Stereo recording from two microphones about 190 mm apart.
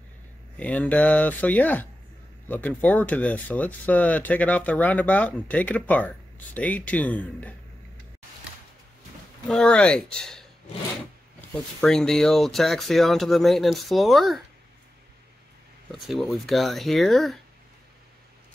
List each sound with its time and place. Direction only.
0.6 s speech: 5° left (ahead or behind)
9.5 s speech: 5° left (ahead or behind)
11.5 s speech: 5° left (ahead or behind)
15.9 s speech: centre (ahead or behind)